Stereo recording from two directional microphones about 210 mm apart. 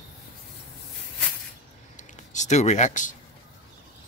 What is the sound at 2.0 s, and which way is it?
Speech, 35° left (ahead or behind).